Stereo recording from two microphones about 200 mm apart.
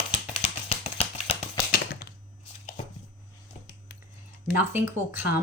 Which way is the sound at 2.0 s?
45° left (ahead or behind).